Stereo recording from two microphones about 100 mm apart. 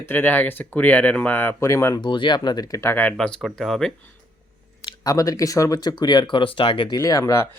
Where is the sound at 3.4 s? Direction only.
Centre (ahead or behind).